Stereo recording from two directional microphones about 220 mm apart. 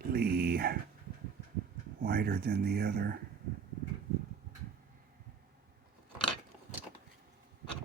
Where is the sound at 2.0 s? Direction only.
45° right (ahead or behind).